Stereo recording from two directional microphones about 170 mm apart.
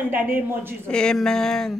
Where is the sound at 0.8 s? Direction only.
5° left (ahead or behind).